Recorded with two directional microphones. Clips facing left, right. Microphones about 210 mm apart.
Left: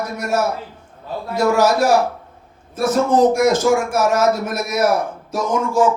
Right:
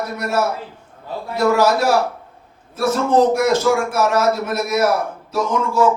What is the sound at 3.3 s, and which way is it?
A man's voice, 45° left (ahead or behind).